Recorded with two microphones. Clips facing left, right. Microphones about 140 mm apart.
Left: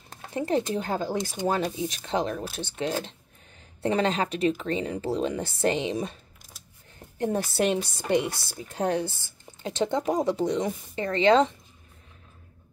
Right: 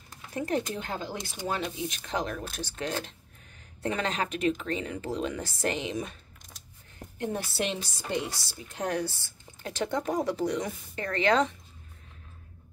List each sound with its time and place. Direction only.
0.3 s speech: 25° left (ahead or behind)
0.8 s speech: 40° left (ahead or behind)
7.2 s speech: 40° left (ahead or behind); by 8.5 s 60° left (ahead or behind)
8.7 s speech: 25° left (ahead or behind)